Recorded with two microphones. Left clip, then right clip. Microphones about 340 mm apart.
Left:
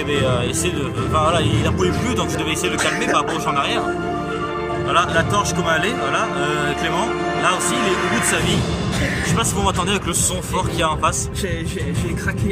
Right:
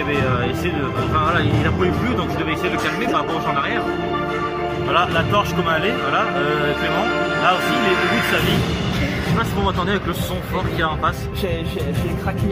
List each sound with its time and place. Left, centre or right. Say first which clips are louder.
1.1 s speech: left 2 dB; centre
3.2 s speech: left 1 dB; centre
4.9 s a man's voice: even; centre